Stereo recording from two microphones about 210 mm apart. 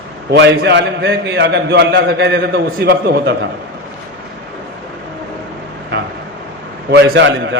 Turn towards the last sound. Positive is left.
turn(degrees=-60)  # may be behind; listen again after turning